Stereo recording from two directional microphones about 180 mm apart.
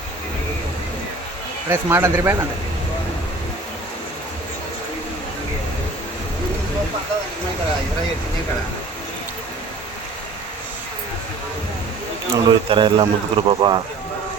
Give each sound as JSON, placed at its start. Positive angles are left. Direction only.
{"t": 1.7, "sound": "speech", "side_deg": -15}
{"t": 12.3, "sound": "speech", "side_deg": -30}